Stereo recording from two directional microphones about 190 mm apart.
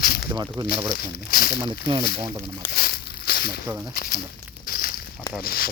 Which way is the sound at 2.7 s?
55° left (ahead or behind).